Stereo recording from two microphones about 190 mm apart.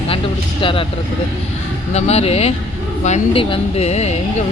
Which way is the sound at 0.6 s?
25° left (ahead or behind).